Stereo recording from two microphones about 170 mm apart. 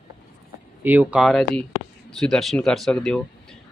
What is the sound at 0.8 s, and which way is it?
Speech, 10° right (ahead or behind).